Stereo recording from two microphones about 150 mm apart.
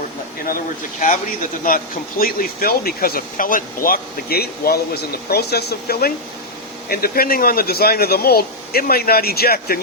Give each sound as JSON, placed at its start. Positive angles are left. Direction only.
{"t": 0.4, "sound": "speech", "side_deg": 65}
{"t": 1.6, "sound": "speech", "side_deg": 70}